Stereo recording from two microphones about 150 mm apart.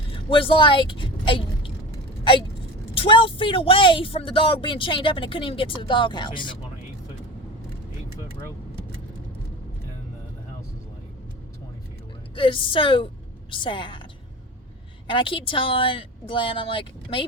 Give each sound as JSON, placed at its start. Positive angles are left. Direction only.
{"t": 0.1, "sound": "vehicle", "side_deg": 35}
{"t": 2.9, "sound": "speech", "side_deg": 35}
{"t": 12.4, "sound": "speech", "side_deg": 35}
{"t": 15.0, "sound": "speech", "side_deg": 35}